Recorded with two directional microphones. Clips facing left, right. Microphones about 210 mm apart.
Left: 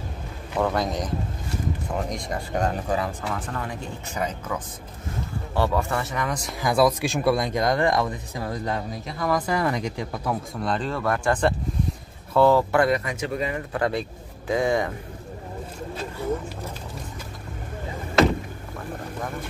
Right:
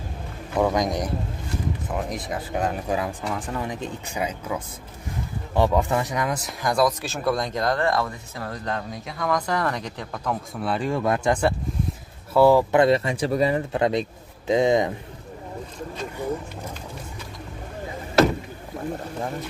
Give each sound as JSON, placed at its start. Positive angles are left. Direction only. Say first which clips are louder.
{"t": 0.6, "sound": "speech", "louder": "right 2 dB", "side_deg": -15}
{"t": 5.6, "sound": "speech", "louder": "right 3 dB", "side_deg": -15}
{"t": 6.6, "sound": "speech", "louder": "left 2 dB", "side_deg": 5}
{"t": 12.8, "sound": "speech", "louder": "right 4 dB", "side_deg": -30}
{"t": 13.7, "sound": "speech", "louder": "right 3 dB", "side_deg": -20}